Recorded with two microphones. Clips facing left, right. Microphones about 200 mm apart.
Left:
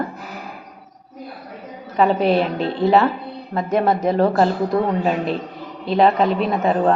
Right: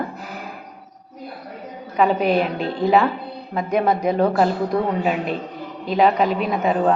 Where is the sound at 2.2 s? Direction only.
35° left (ahead or behind).